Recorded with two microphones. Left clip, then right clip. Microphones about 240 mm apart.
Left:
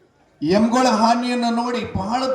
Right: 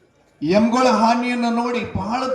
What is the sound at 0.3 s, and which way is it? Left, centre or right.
A man's voice, left.